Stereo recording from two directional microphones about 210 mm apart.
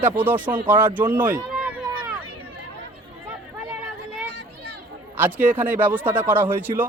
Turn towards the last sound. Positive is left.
turn(degrees=-10)  # may be behind; listen again after turning